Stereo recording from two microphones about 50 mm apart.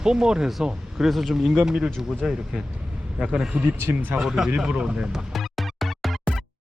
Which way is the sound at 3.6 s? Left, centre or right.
Right.